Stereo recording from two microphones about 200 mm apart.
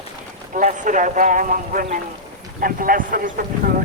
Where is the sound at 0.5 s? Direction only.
40° right (ahead or behind).